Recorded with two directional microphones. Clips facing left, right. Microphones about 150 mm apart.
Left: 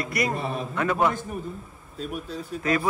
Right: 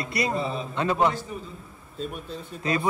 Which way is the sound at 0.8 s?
25° right (ahead or behind).